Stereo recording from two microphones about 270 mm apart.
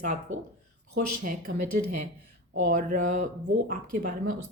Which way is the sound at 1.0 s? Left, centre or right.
Right.